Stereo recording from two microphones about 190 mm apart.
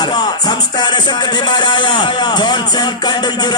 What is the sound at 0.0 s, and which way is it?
Speech, 20° left (ahead or behind).